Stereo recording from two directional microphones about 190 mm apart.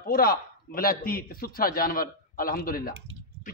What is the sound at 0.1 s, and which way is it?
A man's voice, 50° left (ahead or behind).